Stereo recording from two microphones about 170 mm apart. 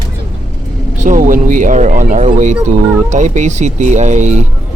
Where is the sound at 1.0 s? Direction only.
50° right (ahead or behind).